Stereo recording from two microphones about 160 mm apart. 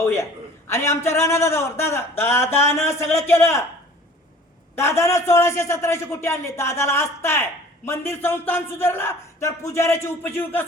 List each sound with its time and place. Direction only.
0.0 s speech: 15° left (ahead or behind)
4.7 s speech: 15° left (ahead or behind)